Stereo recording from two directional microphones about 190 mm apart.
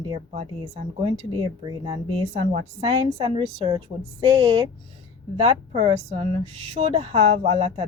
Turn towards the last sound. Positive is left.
turn(degrees=-35)  # may be behind; listen again after turning